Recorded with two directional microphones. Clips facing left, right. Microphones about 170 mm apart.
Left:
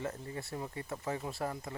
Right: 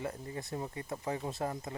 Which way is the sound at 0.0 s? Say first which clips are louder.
Even; 20° right (ahead or behind).